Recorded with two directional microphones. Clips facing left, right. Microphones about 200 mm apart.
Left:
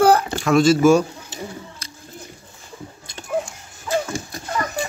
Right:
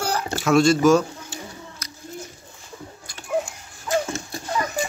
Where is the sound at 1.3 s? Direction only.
30° left (ahead or behind).